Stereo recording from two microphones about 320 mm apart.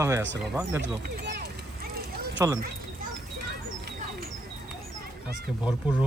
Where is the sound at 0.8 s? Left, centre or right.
Right.